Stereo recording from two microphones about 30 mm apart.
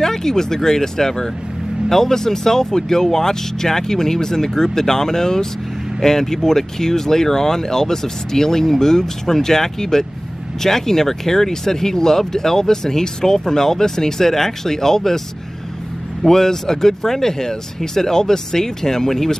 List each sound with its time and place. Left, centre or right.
0.0 s speech: centre
16.3 s speech: centre